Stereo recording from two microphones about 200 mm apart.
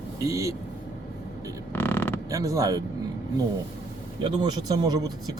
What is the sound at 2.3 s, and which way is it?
Speech, 15° right (ahead or behind).